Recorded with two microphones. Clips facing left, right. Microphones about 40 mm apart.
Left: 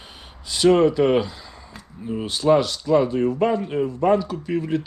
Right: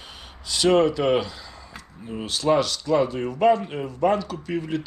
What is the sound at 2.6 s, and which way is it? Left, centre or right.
Speech, centre.